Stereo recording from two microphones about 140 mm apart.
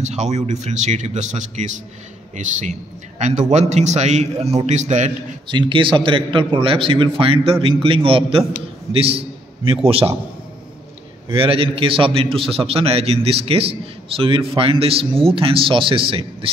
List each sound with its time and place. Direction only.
0.0 s a man's voice: 55° right (ahead or behind)
5.5 s a man's voice: 35° right (ahead or behind)
11.3 s a man's voice: 40° right (ahead or behind)